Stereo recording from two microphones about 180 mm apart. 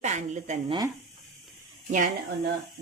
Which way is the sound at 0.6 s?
25° right (ahead or behind).